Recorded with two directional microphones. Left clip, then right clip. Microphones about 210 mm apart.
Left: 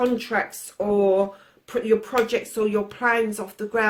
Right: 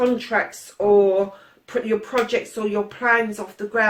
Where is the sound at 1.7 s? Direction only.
45° left (ahead or behind).